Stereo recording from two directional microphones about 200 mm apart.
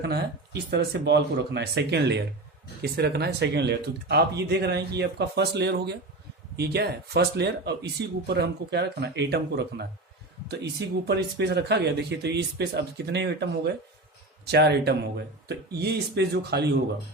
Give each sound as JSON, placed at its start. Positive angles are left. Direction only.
{"t": 0.0, "sound": "speech", "side_deg": -55}